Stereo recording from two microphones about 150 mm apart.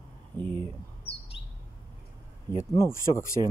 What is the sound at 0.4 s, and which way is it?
Speech, 30° right (ahead or behind).